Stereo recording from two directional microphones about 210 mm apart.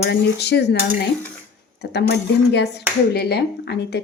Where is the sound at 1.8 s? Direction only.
50° left (ahead or behind).